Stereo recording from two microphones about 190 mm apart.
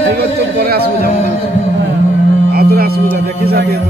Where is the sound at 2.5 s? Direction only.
55° right (ahead or behind).